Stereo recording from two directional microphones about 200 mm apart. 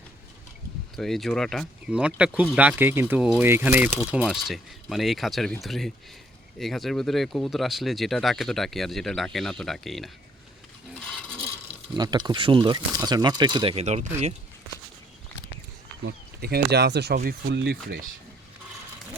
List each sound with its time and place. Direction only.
0.9 s speech: centre (ahead or behind)
11.0 s filing: centre (ahead or behind)
11.9 s speech: 20° right (ahead or behind)
16.0 s speech: 55° right (ahead or behind)